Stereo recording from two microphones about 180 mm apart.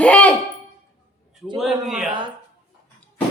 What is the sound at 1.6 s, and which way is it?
Speech, centre (ahead or behind).